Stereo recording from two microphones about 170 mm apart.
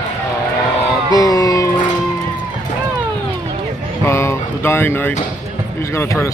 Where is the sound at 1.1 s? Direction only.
20° left (ahead or behind).